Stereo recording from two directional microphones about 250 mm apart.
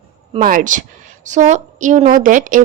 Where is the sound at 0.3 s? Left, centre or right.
Right.